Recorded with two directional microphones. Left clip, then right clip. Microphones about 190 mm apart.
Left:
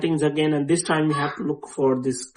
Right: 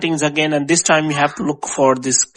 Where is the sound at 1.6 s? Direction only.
50° right (ahead or behind).